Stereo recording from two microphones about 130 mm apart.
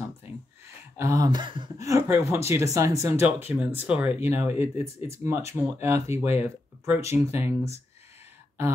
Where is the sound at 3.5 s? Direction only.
10° right (ahead or behind).